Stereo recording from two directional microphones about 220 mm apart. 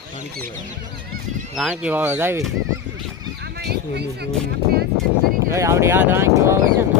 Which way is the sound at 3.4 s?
50° right (ahead or behind).